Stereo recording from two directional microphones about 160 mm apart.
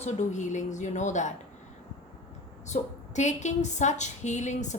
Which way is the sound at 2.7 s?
45° left (ahead or behind).